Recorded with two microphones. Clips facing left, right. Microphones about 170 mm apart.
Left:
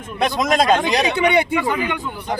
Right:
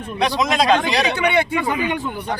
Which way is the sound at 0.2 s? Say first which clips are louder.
Left 1 dB; 50° left (ahead or behind).